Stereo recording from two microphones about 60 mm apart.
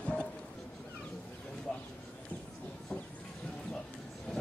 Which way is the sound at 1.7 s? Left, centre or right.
Centre.